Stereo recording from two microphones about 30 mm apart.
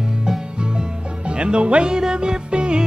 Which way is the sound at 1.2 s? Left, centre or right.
Right.